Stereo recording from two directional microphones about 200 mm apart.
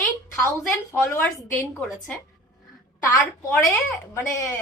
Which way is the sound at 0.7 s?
5° left (ahead or behind).